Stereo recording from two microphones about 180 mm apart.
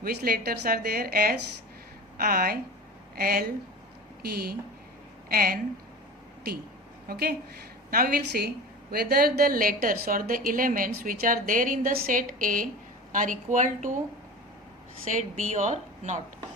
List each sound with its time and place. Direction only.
0.0 s a woman's voice: 60° right (ahead or behind)
7.1 s a woman's voice: 60° right (ahead or behind)
15.1 s a woman's voice: 45° right (ahead or behind)